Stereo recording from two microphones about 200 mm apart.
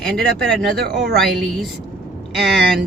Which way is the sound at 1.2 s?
Centre (ahead or behind).